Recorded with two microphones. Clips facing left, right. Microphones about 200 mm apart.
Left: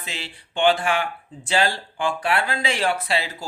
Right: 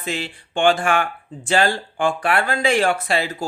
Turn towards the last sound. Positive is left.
turn(degrees=-50)  # may be behind; listen again after turning